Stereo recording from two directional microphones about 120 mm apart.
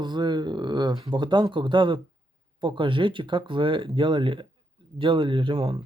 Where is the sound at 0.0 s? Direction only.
40° right (ahead or behind).